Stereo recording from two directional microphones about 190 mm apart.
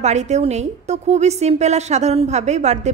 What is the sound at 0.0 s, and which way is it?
A woman's voice, 35° right (ahead or behind).